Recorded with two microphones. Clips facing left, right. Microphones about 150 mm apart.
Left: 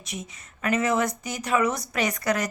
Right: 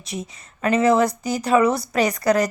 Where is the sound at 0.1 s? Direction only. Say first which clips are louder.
Right 6 dB; 30° right (ahead or behind).